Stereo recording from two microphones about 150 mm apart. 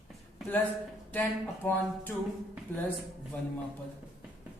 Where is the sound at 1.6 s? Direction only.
15° left (ahead or behind).